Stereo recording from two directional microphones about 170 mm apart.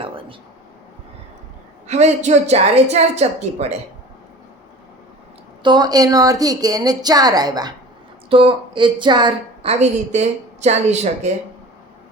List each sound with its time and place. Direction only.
1.9 s a woman's voice: 40° right (ahead or behind)
5.6 s a woman's voice: 25° right (ahead or behind)
9.8 s a woman's voice: 40° right (ahead or behind)